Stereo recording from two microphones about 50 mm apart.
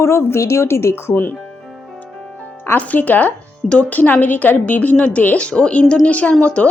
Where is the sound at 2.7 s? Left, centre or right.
Left.